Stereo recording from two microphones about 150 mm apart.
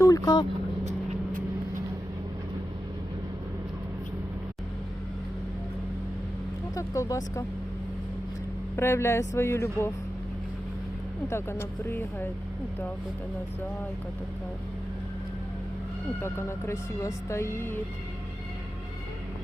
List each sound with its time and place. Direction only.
0.0 s vehicle: 25° left (ahead or behind)
6.7 s speech: 20° left (ahead or behind)
8.7 s speech: 15° left (ahead or behind)
11.3 s speech: 15° left (ahead or behind)
16.2 s speech: 15° left (ahead or behind)